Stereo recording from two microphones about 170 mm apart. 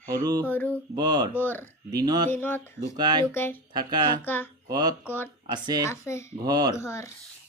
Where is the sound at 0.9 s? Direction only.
25° right (ahead or behind).